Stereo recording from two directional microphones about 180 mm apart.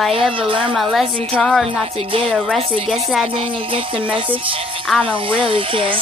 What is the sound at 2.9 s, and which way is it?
Speech, centre (ahead or behind).